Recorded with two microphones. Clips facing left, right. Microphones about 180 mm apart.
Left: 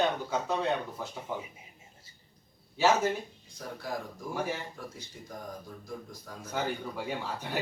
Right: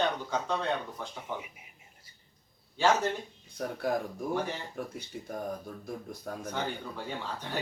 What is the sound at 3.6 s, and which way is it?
Speech, 60° right (ahead or behind).